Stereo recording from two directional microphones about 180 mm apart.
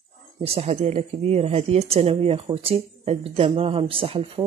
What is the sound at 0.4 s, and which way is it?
Speech, 35° right (ahead or behind).